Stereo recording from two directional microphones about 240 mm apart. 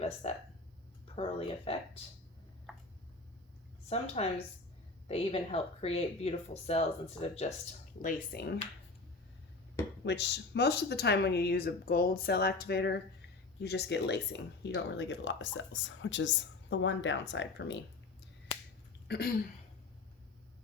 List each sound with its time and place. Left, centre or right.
0.0 s speech: left
3.8 s speech: left
8.0 s speech: left
10.0 s speech: left
19.0 s a sound: left